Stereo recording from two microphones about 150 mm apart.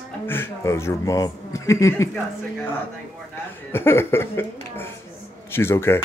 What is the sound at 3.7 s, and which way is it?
Speech, 15° left (ahead or behind).